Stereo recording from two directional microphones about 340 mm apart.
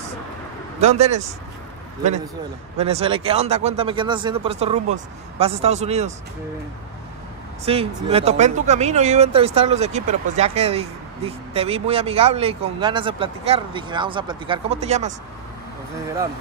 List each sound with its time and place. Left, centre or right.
0.7 s speech: centre
2.8 s speech: centre
7.6 s speech: centre